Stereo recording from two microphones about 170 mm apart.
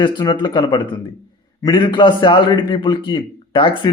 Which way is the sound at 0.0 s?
25° left (ahead or behind).